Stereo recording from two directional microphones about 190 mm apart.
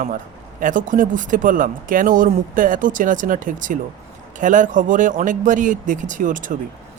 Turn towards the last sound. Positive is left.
turn(degrees=-45)  # may be behind; listen again after turning